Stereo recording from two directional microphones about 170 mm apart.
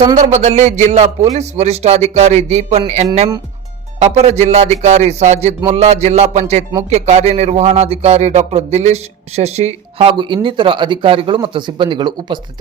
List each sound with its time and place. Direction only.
0.3 s a man's voice: 40° right (ahead or behind); by 12.4 s 25° right (ahead or behind)